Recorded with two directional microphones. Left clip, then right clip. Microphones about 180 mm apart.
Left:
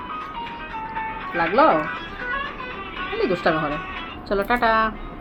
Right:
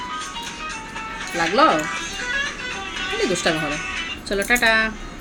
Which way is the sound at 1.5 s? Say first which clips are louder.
Even; 20° right (ahead or behind).